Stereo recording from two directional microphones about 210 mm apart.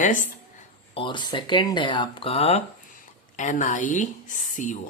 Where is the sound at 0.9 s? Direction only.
25° left (ahead or behind).